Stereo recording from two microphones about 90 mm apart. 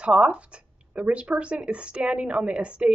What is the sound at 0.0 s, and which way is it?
A woman's voice, 15° right (ahead or behind).